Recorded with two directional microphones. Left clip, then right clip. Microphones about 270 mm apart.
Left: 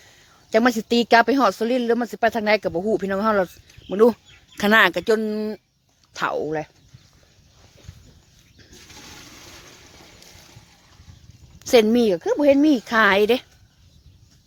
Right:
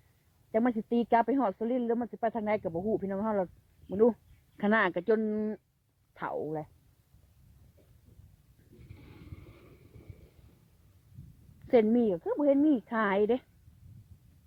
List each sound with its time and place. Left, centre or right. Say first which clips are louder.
0.5 s speech: left 11 dB; left
6.1 s speech: left 11 dB; left
11.7 s speech: left 9 dB; centre